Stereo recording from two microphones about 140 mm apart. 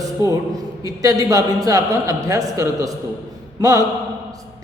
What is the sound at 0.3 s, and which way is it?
A woman's voice, 25° right (ahead or behind).